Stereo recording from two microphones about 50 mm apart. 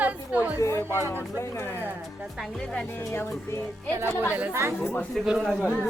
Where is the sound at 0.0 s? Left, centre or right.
Right.